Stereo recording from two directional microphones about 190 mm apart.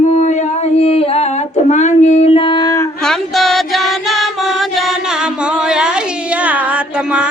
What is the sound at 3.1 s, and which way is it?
Music, centre (ahead or behind).